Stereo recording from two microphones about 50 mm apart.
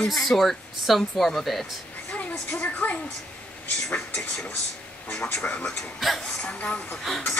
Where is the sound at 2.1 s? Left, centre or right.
Left.